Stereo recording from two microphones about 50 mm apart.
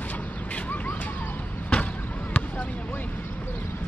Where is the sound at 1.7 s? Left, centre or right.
Left.